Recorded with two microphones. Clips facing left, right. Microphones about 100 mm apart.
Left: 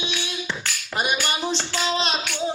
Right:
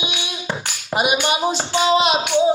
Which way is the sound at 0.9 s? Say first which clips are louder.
Right 6 dB; 15° right (ahead or behind).